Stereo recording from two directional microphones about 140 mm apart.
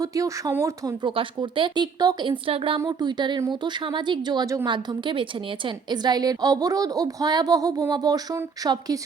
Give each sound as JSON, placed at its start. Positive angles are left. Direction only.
{"t": 0.0, "sound": "a woman's voice", "side_deg": -25}
{"t": 1.0, "sound": "speech", "side_deg": -35}
{"t": 2.8, "sound": "a woman's voice", "side_deg": -30}